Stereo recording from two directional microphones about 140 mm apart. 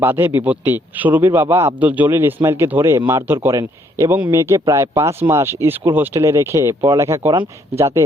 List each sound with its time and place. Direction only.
0.0 s a man's voice: 15° right (ahead or behind)